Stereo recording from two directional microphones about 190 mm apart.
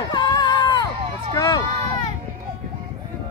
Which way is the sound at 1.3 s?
20° left (ahead or behind).